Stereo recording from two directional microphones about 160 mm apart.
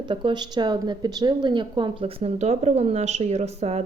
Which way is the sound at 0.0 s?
30° right (ahead or behind).